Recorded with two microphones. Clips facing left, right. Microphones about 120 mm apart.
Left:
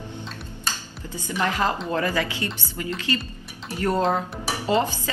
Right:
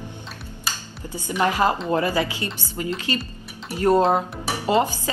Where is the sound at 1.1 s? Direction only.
15° right (ahead or behind).